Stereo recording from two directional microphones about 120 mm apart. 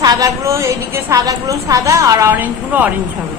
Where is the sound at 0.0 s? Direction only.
30° right (ahead or behind).